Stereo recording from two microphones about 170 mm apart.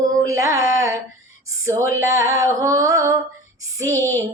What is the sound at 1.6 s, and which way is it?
Female singing, 20° right (ahead or behind).